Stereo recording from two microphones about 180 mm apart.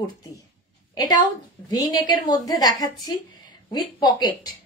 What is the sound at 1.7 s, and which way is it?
A woman's voice, 20° left (ahead or behind).